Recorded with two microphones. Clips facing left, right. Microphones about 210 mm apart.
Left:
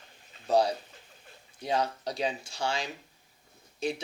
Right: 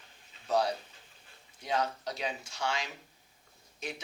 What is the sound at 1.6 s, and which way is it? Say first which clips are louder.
Speech: left 3 dB; 30° left (ahead or behind).